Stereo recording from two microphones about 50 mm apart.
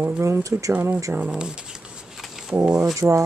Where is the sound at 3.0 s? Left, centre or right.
Right.